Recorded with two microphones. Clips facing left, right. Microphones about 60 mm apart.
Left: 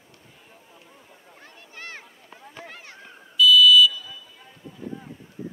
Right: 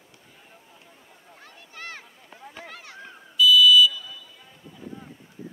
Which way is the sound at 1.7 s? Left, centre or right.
Left.